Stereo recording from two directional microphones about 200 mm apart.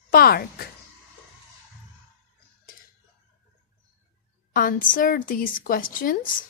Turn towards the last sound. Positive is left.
turn(degrees=45)  # may be behind; listen again after turning